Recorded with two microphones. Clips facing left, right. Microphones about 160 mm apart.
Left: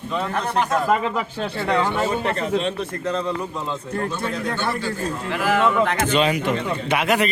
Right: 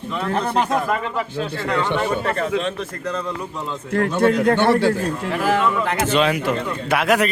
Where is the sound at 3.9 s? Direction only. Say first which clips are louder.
Right 11 dB; 85° right.